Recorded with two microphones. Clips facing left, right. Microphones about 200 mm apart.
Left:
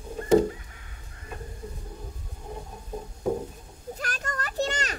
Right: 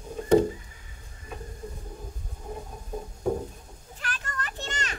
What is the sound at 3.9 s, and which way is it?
Children playing, 40° left (ahead or behind).